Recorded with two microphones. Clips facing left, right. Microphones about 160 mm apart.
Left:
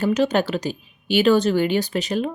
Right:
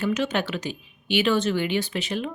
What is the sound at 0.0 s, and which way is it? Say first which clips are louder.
Speech: left 5 dB; 35° left (ahead or behind).